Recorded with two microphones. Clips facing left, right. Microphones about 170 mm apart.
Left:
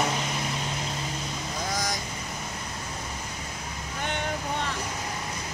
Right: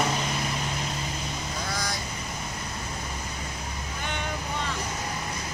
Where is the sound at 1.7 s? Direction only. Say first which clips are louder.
Left 3 dB; 15° left (ahead or behind).